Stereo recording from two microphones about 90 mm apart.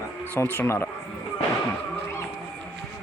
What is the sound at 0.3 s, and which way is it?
Speech, 25° left (ahead or behind).